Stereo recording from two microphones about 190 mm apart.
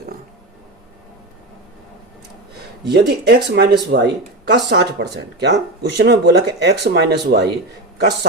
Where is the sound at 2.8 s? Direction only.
55° right (ahead or behind).